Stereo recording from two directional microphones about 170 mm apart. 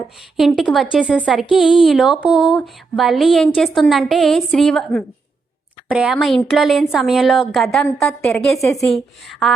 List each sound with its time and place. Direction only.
0.3 s speech: centre (ahead or behind)
8.5 s a woman's voice: 20° left (ahead or behind)
8.8 s speech: centre (ahead or behind)